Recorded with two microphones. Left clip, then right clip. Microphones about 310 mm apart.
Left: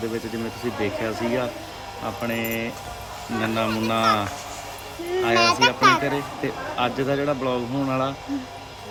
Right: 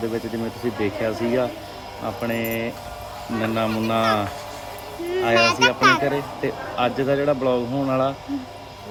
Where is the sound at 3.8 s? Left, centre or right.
Centre.